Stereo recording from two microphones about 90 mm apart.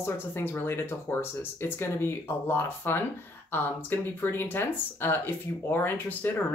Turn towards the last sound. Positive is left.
turn(degrees=20)  # may be behind; listen again after turning